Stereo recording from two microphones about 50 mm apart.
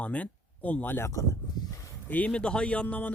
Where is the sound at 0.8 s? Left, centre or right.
Left.